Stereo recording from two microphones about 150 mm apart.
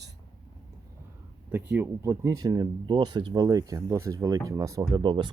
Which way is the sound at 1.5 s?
10° right (ahead or behind).